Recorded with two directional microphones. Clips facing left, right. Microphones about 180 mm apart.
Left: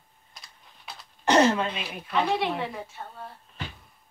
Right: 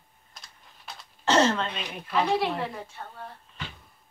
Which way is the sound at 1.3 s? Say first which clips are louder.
Left 2 dB; 15° left (ahead or behind).